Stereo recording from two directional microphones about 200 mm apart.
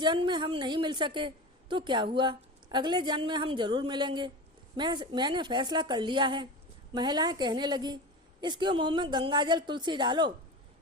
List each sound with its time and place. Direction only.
0.0 s a woman's voice: 20° right (ahead or behind)